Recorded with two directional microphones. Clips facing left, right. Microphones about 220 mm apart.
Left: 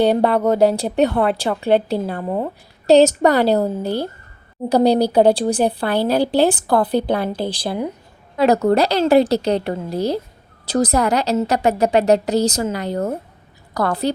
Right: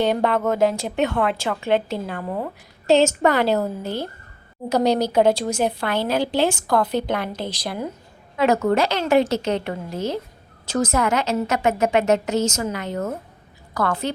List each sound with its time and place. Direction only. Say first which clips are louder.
0.0 s a woman's voice: left 5 dB; 35° left (ahead or behind)
4.7 s a woman's voice: left 4 dB; 35° left (ahead or behind)